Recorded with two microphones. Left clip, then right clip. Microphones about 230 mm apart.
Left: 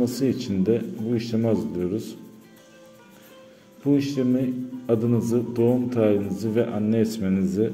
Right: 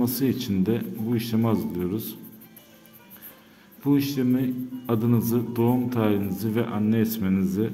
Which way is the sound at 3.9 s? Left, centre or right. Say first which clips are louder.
Left 1 dB; right.